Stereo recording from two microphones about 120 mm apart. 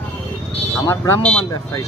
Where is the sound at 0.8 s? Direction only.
25° left (ahead or behind).